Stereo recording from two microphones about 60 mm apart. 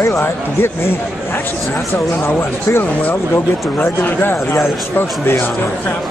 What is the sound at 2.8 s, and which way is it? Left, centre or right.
A man's voice, left.